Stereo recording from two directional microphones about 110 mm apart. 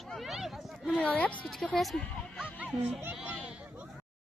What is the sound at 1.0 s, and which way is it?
Speech, 10° left (ahead or behind).